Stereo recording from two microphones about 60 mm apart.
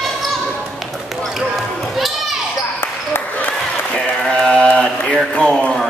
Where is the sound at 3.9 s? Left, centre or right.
Centre.